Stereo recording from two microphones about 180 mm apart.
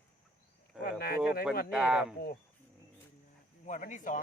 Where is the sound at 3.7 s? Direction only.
45° left (ahead or behind).